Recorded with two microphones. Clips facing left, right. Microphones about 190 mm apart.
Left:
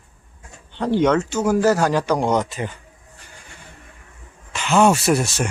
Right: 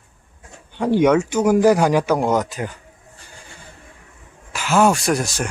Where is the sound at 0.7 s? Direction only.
10° right (ahead or behind).